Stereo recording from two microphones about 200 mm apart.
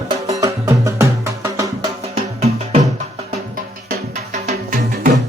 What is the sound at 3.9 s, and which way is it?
Music, 35° right (ahead or behind).